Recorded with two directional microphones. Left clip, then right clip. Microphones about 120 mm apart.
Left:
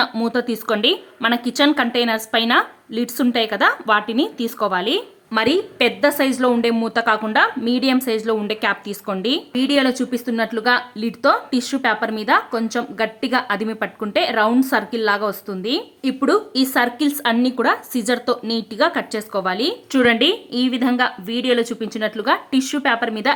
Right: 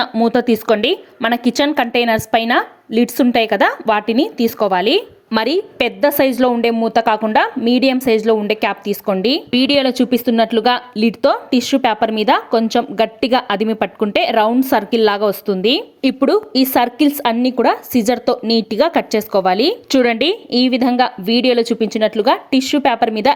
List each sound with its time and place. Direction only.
0.3 s a woman's voice: 40° right (ahead or behind)
5.3 s a woman's voice: 55° right (ahead or behind); by 9.1 s 30° right (ahead or behind)
9.2 s a woman's voice: 50° right (ahead or behind)
10.0 s a woman's voice: 40° right (ahead or behind)
11.8 s a woman's voice: 45° right (ahead or behind); by 22.8 s 30° right (ahead or behind)
22.8 s a woman's voice: 40° right (ahead or behind)